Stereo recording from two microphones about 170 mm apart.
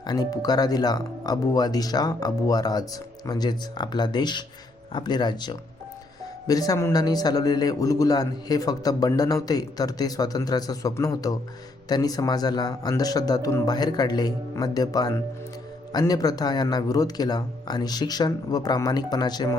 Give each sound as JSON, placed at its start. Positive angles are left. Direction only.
{"t": 0.0, "sound": "a man's voice", "side_deg": 25}